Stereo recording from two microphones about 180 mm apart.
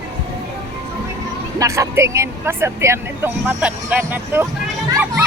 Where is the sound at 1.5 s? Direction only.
15° right (ahead or behind).